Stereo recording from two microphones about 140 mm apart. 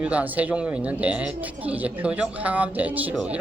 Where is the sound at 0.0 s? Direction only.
10° right (ahead or behind).